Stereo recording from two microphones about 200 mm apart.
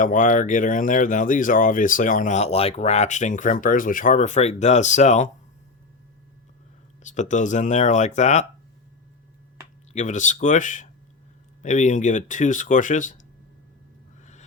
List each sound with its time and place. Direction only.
0.0 s speech: 40° left (ahead or behind)
7.0 s speech: 40° left (ahead or behind)
9.9 s speech: 35° left (ahead or behind)